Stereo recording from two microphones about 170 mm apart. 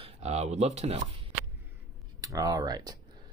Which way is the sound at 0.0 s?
40° right (ahead or behind).